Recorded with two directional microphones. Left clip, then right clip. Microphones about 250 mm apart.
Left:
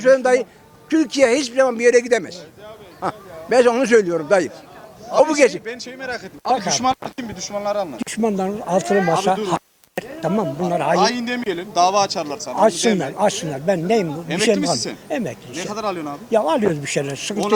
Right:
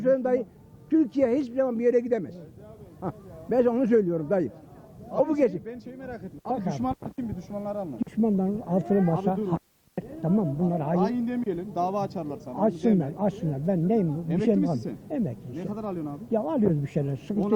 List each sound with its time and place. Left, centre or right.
0.0 s a man's voice: centre
4.0 s speech: centre
4.3 s speech: centre